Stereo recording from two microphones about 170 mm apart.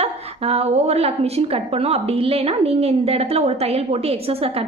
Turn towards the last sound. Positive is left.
turn(degrees=-35)  # may be behind; listen again after turning